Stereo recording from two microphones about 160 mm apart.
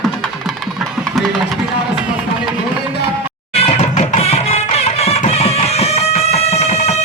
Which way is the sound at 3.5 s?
40° left (ahead or behind).